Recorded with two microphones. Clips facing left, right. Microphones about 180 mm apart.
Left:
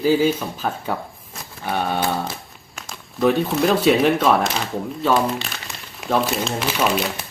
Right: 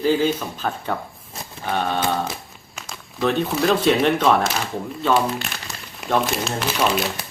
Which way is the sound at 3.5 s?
5° left (ahead or behind).